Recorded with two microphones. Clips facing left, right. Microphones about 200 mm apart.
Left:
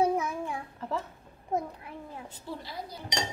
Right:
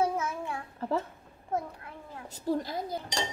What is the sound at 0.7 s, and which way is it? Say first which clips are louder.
Speech: right 6 dB; 35° right (ahead or behind).